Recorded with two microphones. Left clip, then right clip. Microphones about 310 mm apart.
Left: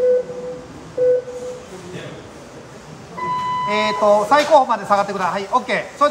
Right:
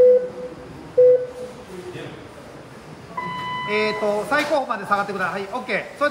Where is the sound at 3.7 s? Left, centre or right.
Left.